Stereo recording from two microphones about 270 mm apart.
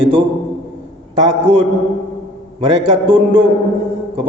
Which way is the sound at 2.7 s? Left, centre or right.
Centre.